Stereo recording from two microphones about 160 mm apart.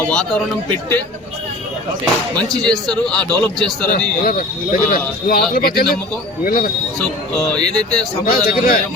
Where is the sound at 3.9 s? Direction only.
65° left (ahead or behind).